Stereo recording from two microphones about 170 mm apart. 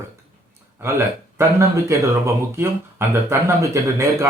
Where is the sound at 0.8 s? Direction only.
15° right (ahead or behind).